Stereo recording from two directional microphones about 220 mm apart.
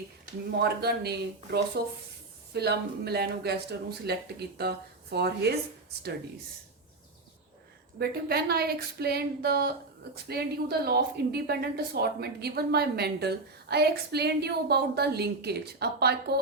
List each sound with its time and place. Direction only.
0.6 s a woman's voice: 45° right (ahead or behind)
7.9 s a woman's voice: 45° right (ahead or behind)